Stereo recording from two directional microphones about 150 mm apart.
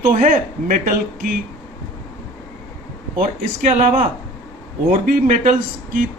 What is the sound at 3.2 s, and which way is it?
Speech, 60° right (ahead or behind).